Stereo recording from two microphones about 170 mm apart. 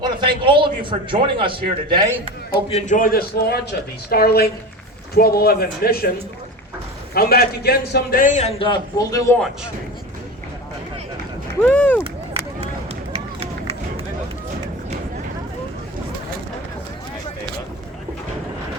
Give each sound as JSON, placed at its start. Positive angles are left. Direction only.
{"t": 0.0, "sound": "a man's voice", "side_deg": -25}
{"t": 2.6, "sound": "a man's voice", "side_deg": 40}
{"t": 8.5, "sound": "a man's voice", "side_deg": 25}
{"t": 11.6, "sound": "speech", "side_deg": 10}
{"t": 13.1, "sound": "run", "side_deg": -35}